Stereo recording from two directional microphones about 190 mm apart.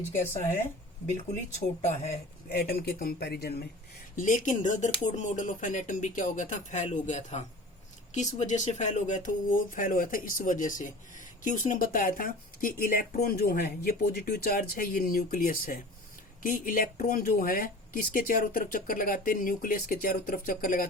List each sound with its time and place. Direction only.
1.1 s speech: 40° left (ahead or behind)
2.5 s speech: 55° left (ahead or behind)
4.1 s speech: 45° left (ahead or behind)